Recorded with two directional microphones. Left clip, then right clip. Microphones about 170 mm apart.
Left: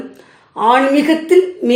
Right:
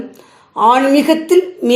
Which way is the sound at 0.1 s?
30° right (ahead or behind).